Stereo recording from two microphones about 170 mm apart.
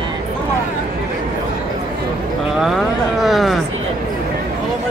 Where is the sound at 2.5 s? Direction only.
Centre (ahead or behind).